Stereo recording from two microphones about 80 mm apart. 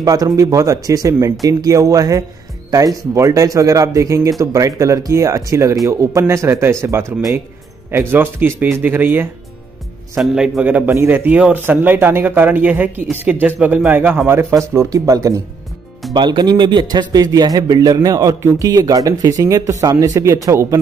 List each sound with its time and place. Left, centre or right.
0.0 s speech: right
10.1 s a man's voice: centre
10.6 s speech: right
14.9 s speech: right
16.1 s speech: right